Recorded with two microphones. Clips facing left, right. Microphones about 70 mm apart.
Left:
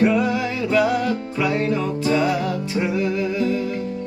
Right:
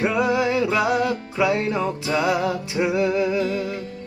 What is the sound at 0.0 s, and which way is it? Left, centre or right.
Music, centre.